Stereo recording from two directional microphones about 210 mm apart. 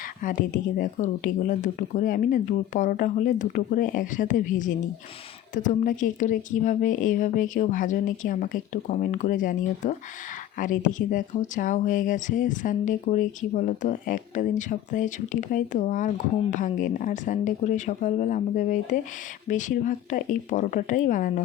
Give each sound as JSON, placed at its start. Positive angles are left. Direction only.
{"t": 0.2, "sound": "speech", "side_deg": 40}